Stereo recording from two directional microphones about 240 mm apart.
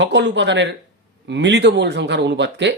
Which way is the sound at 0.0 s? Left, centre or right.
Right.